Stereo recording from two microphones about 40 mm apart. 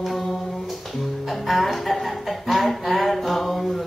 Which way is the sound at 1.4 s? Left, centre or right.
Centre.